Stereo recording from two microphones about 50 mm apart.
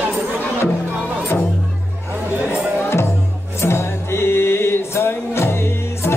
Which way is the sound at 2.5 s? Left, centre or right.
Left.